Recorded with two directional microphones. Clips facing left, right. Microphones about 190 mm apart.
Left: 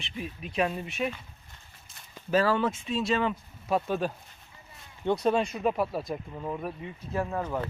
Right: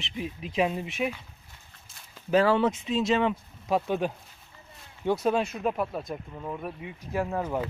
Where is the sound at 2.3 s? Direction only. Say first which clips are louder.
Right 3 dB; 15° right (ahead or behind).